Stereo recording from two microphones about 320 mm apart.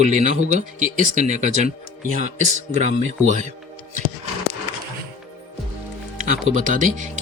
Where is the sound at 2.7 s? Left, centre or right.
Right.